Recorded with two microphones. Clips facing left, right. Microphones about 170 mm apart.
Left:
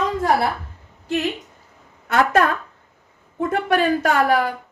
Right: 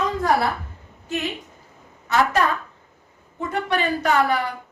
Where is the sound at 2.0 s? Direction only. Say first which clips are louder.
Left 2 dB; 55° left (ahead or behind).